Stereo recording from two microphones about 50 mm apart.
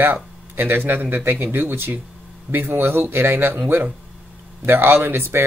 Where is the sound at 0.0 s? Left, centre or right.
Right.